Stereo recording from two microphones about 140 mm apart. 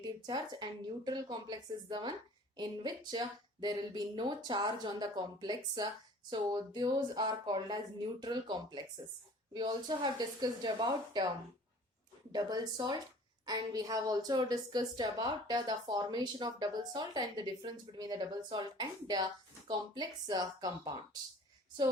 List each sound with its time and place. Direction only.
0.0 s a woman's voice: 30° right (ahead or behind)
12.3 s a woman's voice: 30° right (ahead or behind)